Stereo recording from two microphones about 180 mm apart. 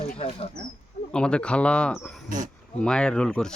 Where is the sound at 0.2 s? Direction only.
30° left (ahead or behind).